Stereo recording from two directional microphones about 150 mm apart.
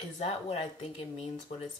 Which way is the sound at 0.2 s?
45° left (ahead or behind).